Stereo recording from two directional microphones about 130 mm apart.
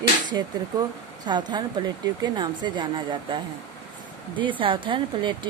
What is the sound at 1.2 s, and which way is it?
Speech, 35° right (ahead or behind).